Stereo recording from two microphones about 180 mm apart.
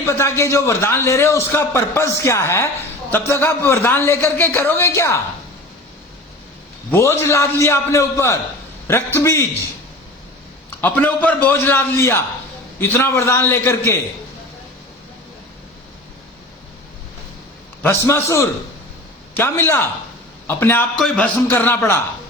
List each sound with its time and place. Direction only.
0.0 s a man's voice: 15° left (ahead or behind)
6.9 s a man's voice: 15° left (ahead or behind)
10.8 s a man's voice: 10° left (ahead or behind)
17.8 s a man's voice: 15° left (ahead or behind)